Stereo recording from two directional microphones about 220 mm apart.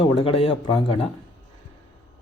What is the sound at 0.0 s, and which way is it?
Speech, 25° left (ahead or behind).